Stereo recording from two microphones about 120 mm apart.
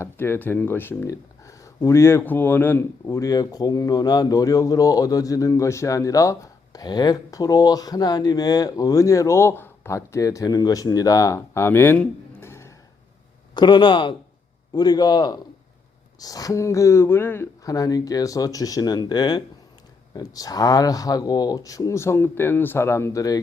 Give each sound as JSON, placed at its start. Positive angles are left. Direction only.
{"t": 0.0, "sound": "speech", "side_deg": 20}
{"t": 1.0, "sound": "speech", "side_deg": 30}
{"t": 3.1, "sound": "speech", "side_deg": 30}
{"t": 11.9, "sound": "a sound", "side_deg": 20}
{"t": 13.5, "sound": "speech", "side_deg": 40}